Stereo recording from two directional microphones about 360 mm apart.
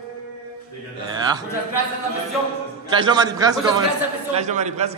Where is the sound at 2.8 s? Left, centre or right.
Centre.